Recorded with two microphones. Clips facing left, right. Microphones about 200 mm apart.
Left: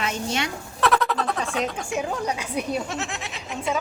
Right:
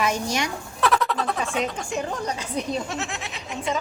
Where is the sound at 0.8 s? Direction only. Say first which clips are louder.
Left 1 dB; centre (ahead or behind).